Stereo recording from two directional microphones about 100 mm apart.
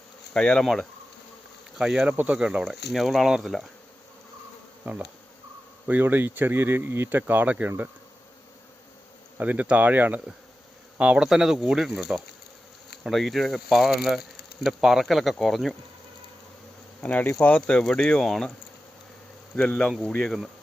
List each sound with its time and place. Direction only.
0.3 s speech: 5° left (ahead or behind)
1.8 s speech: 10° right (ahead or behind)
4.9 s speech: 20° right (ahead or behind)
9.4 s speech: 15° right (ahead or behind); by 15.7 s centre (ahead or behind)
17.0 s speech: 15° left (ahead or behind)
19.5 s speech: 5° left (ahead or behind)